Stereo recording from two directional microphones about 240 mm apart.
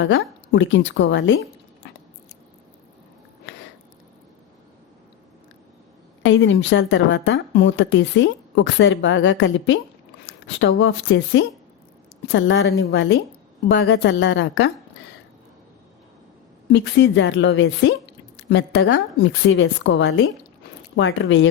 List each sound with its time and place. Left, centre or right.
0.0 s a woman's voice: left
1.8 s biting: left
6.2 s a woman's voice: left
16.7 s a woman's voice: left